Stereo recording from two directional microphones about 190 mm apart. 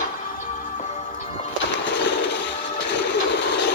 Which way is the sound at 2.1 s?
65° left (ahead or behind).